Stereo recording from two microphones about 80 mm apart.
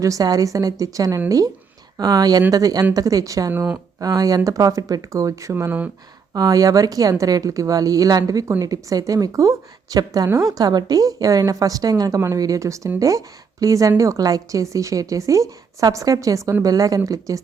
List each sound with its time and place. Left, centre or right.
0.0 s a woman's voice: right
6.3 s a woman's voice: right